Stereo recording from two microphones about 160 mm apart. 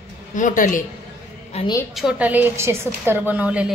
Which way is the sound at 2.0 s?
5° right (ahead or behind).